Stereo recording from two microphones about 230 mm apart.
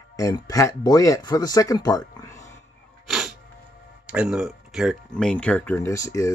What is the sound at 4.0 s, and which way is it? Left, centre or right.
Speech, centre.